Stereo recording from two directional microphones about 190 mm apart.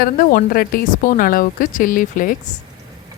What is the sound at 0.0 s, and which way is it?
Speech, 50° left (ahead or behind).